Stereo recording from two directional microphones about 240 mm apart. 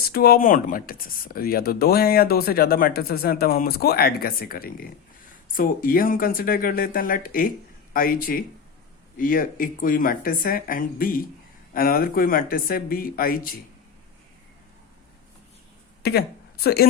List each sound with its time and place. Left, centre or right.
0.1 s speech: left
16.0 s speech: left